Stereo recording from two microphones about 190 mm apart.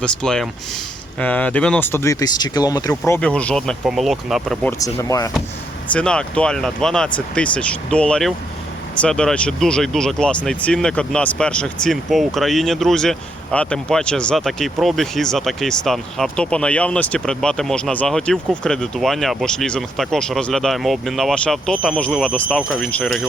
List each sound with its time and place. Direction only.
0.0 s speech: 5° left (ahead or behind); by 2.9 s 20° left (ahead or behind)
3.1 s speech: 5° left (ahead or behind)
4.9 s speech: 15° left (ahead or behind)
5.9 s speech: 5° left (ahead or behind)